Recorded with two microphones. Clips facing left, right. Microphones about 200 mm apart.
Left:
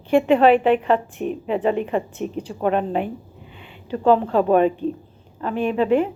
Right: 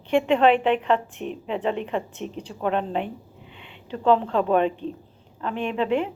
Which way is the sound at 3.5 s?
5° left (ahead or behind).